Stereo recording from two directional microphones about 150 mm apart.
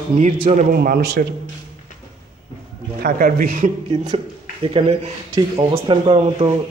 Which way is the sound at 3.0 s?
75° right (ahead or behind).